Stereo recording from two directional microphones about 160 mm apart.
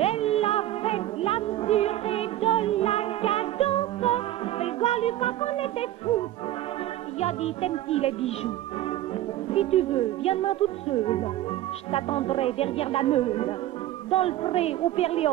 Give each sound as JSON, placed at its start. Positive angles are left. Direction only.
{"t": 0.0, "sound": "music", "side_deg": 40}
{"t": 9.5, "sound": "speech", "side_deg": 40}